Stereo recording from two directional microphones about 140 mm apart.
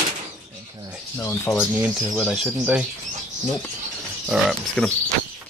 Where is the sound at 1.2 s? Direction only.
15° left (ahead or behind).